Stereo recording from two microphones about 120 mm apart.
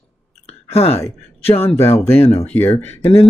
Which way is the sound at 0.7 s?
55° left (ahead or behind).